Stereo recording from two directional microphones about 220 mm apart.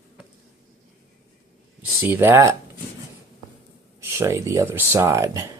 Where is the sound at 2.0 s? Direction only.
10° right (ahead or behind).